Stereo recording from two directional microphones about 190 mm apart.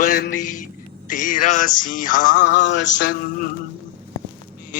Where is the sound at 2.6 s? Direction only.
70° left (ahead or behind).